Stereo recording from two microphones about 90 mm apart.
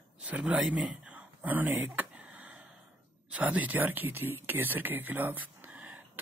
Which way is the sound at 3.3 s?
15° right (ahead or behind).